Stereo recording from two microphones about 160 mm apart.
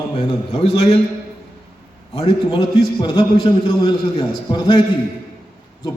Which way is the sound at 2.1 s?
35° left (ahead or behind).